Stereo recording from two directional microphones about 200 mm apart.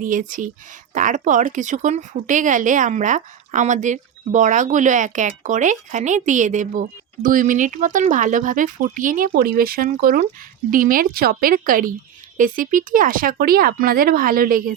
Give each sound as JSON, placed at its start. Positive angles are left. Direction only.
{"t": 0.0, "sound": "speech", "side_deg": -40}